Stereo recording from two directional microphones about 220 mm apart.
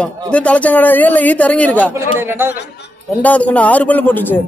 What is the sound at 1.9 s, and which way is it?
Speech, 10° right (ahead or behind).